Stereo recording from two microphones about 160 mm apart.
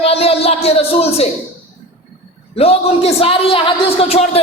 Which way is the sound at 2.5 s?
40° left (ahead or behind).